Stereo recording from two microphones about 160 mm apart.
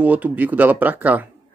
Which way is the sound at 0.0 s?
10° right (ahead or behind).